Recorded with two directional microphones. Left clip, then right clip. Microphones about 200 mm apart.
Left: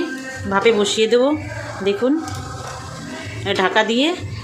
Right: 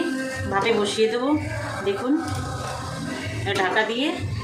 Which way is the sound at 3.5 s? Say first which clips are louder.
Left 5 dB; 60° left (ahead or behind).